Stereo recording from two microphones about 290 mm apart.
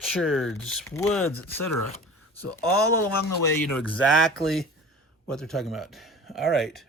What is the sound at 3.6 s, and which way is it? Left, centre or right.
Speech, centre.